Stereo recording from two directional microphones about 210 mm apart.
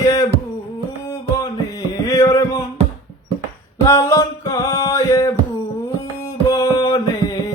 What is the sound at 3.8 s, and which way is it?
Music, 15° left (ahead or behind).